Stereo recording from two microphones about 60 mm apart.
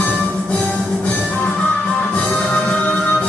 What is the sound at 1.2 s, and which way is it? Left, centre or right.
Music, centre.